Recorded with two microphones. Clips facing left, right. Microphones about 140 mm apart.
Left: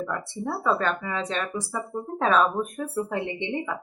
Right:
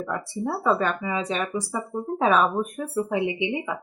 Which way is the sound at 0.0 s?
10° right (ahead or behind).